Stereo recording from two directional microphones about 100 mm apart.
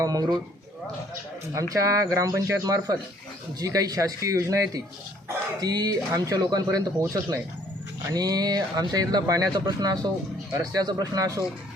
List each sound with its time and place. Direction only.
0.0 s speech: 35° right (ahead or behind)
1.5 s speech: 35° right (ahead or behind)